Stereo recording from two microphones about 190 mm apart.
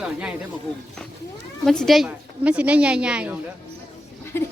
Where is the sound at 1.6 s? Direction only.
Centre (ahead or behind).